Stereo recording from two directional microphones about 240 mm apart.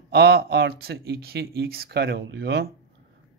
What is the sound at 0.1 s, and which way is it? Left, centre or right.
Speech, right.